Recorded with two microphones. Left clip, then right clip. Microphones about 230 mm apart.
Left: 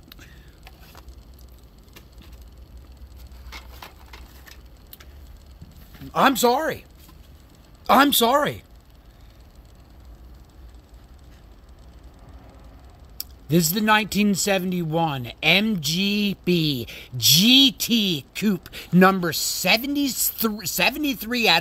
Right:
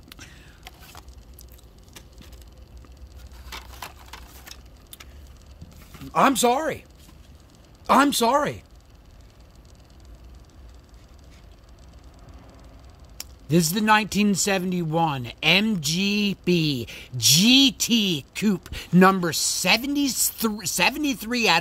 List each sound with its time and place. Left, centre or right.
0.1 s whispering: centre
3.4 s wood: right
6.1 s speech: centre
13.2 s speech: centre